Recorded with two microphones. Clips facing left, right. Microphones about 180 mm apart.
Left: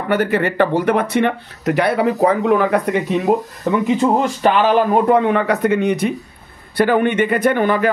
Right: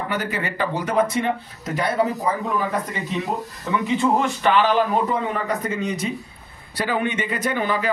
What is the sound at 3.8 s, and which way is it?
Speech, 40° left (ahead or behind).